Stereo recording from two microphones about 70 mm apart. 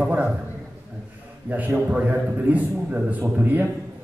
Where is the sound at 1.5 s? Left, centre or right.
Right.